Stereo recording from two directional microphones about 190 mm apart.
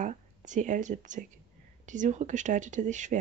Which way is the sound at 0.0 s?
40° right (ahead or behind).